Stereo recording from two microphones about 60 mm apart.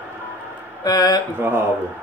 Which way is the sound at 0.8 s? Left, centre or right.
Left.